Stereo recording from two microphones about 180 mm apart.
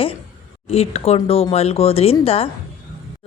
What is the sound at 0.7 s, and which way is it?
A woman's voice, 35° left (ahead or behind).